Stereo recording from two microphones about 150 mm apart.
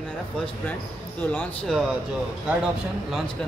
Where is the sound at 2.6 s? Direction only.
5° right (ahead or behind).